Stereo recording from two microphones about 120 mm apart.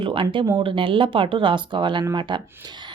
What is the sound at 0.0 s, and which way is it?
Speech, 45° right (ahead or behind).